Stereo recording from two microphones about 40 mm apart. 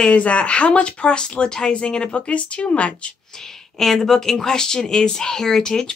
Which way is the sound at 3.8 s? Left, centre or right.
Centre.